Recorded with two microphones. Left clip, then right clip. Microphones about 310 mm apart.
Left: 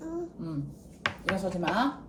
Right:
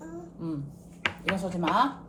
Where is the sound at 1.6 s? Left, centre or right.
Right.